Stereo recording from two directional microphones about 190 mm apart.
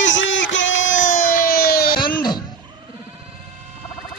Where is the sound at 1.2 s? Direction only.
50° left (ahead or behind).